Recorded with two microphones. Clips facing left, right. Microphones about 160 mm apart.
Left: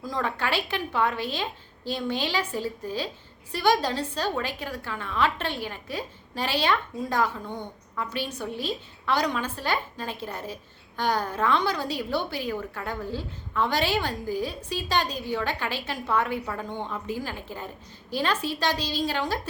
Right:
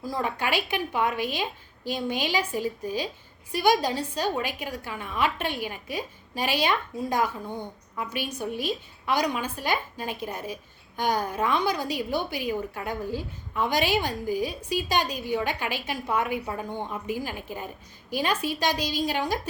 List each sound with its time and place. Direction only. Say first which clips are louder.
0.0 s a woman's voice: even; 10° right (ahead or behind)